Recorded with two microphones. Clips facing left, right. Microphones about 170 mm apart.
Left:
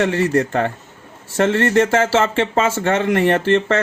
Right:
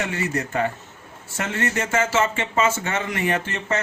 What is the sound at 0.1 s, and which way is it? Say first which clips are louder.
Speech: left 8 dB; 60° left (ahead or behind).